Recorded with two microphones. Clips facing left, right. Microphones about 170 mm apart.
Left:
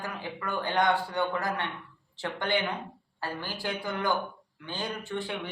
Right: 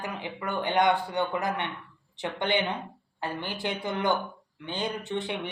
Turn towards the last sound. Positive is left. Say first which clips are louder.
# right 3 dB
turn(degrees=-20)  # may be behind; listen again after turning